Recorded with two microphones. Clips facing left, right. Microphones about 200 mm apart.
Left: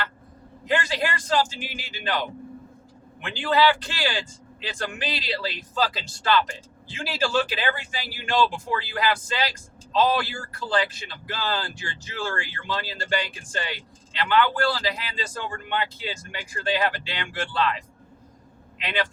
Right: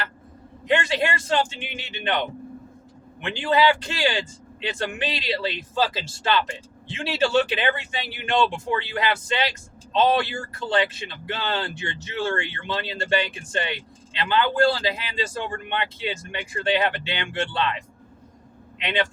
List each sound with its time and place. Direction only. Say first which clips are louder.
0.7 s speech: right 3 dB; 25° right (ahead or behind)
3.2 s speech: right 1 dB; 20° right (ahead or behind)
18.8 s speech: right 3 dB; 25° right (ahead or behind)